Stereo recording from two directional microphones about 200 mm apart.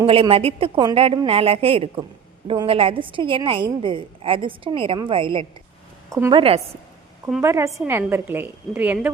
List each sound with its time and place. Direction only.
0.0 s a woman's voice: 25° right (ahead or behind)
6.1 s a woman's voice: 15° right (ahead or behind)
7.4 s a woman's voice: 15° right (ahead or behind)